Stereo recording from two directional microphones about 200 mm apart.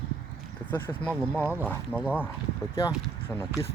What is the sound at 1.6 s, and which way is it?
Speech, 10° left (ahead or behind).